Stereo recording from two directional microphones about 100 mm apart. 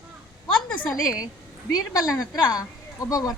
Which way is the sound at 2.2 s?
40° left (ahead or behind).